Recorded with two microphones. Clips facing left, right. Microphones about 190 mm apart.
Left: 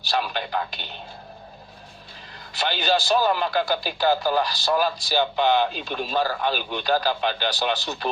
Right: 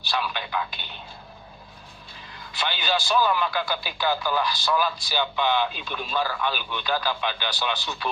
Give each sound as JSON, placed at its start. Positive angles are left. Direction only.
{"t": 0.1, "sound": "speech", "side_deg": 45}
{"t": 2.6, "sound": "a man's voice", "side_deg": 45}